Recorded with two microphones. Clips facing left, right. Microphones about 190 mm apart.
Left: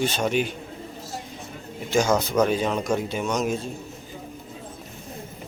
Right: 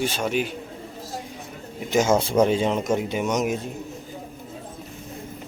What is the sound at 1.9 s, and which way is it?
Speech, 25° right (ahead or behind).